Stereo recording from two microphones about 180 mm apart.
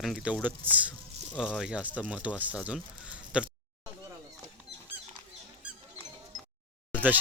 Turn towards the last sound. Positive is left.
turn(degrees=-10)  # may be behind; listen again after turning